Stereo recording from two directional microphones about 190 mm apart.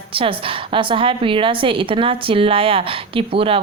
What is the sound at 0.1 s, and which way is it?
A woman's voice, 30° right (ahead or behind).